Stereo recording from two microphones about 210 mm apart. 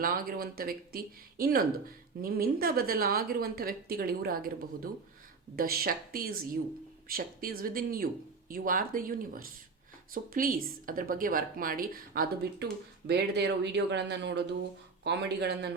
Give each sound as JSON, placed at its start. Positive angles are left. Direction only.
{"t": 0.0, "sound": "a woman's voice", "side_deg": -45}